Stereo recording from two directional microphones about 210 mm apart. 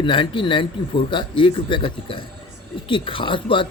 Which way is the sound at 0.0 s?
25° left (ahead or behind).